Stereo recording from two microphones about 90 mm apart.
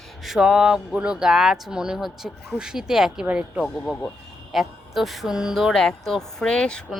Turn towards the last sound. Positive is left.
turn(degrees=10)  # may be behind; listen again after turning